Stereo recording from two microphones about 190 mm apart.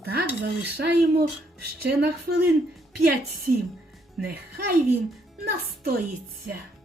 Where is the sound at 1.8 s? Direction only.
55° right (ahead or behind).